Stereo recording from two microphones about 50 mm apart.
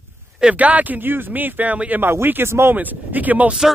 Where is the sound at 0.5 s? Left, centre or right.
Right.